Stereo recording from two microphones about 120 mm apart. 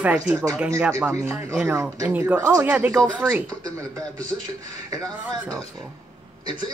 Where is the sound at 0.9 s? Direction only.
25° right (ahead or behind).